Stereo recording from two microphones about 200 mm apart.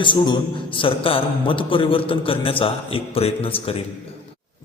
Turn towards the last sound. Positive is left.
turn(degrees=30)  # may be behind; listen again after turning